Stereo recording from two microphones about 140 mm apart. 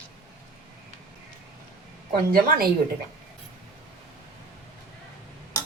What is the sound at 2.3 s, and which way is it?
Speech, 90° right.